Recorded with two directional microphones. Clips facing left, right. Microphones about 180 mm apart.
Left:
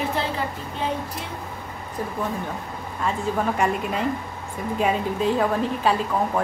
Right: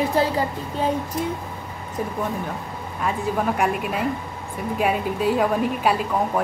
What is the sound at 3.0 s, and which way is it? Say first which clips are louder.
Speech: right 1 dB; 10° right (ahead or behind).